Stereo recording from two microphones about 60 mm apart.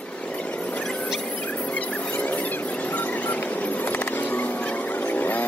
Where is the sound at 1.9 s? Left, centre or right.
Left.